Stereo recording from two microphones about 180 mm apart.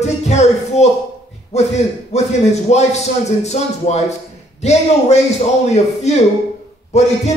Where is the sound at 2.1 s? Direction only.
40° left (ahead or behind).